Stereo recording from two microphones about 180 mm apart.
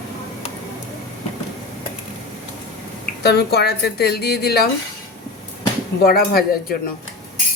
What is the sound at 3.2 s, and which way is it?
Speech, 65° left (ahead or behind).